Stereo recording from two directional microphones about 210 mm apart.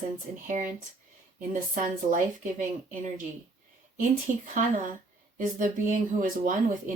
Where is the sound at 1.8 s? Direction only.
35° right (ahead or behind).